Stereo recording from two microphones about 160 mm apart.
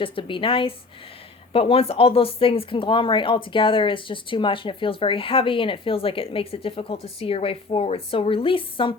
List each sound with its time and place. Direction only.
0.0 s speech: 30° left (ahead or behind)